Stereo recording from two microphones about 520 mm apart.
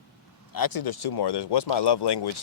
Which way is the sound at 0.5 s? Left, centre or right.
Left.